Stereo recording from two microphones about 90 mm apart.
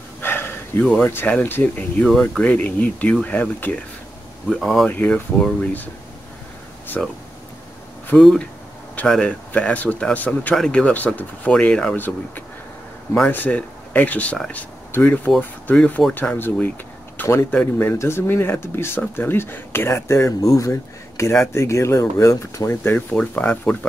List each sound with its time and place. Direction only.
0.2 s a sound: 25° left (ahead or behind)
0.9 s speech: 20° left (ahead or behind)
2.0 s speech: 5° left (ahead or behind)
4.5 s speech: 5° left (ahead or behind)
4.8 s speech: 20° left (ahead or behind)
7.0 s speech: 10° left (ahead or behind)
8.2 s speech: 5° left (ahead or behind)
9.5 s speech: 15° left (ahead or behind)
10.5 s speech: 5° left (ahead or behind)
13.1 s speech: 15° left (ahead or behind); by 22.7 s 35° left (ahead or behind)
22.7 s speech: 25° left (ahead or behind)